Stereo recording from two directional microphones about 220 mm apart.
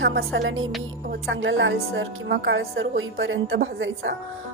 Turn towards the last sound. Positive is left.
turn(degrees=-60)  # may be behind; listen again after turning